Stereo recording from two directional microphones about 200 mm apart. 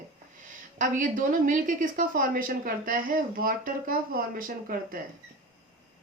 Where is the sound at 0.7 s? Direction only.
40° right (ahead or behind).